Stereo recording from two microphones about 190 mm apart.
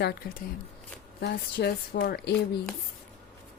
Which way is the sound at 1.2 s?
55° left (ahead or behind).